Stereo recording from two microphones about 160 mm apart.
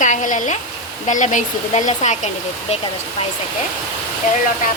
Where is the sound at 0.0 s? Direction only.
55° left (ahead or behind).